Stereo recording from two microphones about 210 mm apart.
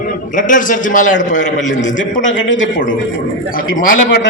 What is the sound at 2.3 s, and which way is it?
Speech, 65° left (ahead or behind).